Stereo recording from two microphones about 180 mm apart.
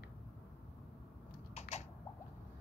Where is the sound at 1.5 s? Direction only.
40° left (ahead or behind).